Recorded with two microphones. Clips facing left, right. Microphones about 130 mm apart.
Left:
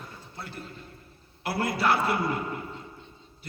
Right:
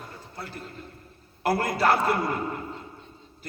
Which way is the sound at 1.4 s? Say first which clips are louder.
Right 3 dB; 45° right (ahead or behind).